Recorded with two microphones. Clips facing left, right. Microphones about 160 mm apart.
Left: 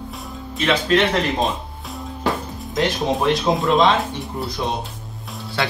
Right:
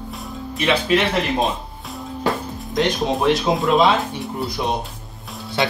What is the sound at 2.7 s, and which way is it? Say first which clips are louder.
Speech: right 1 dB; centre (ahead or behind).